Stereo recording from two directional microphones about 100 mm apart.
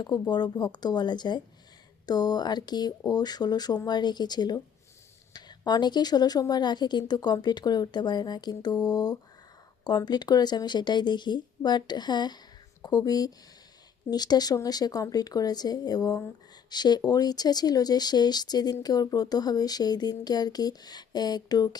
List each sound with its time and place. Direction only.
0.0 s speech: 45° left (ahead or behind)